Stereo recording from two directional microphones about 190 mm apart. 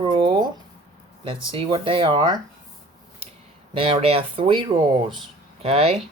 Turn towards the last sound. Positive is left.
turn(degrees=-30)  # may be behind; listen again after turning